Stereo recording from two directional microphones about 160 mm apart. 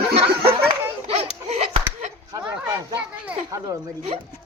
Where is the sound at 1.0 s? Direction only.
40° right (ahead or behind).